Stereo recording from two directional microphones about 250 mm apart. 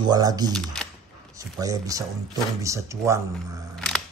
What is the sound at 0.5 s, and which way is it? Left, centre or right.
Speech, centre.